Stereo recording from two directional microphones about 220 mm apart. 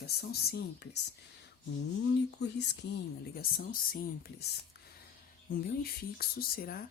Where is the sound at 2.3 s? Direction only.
50° left (ahead or behind).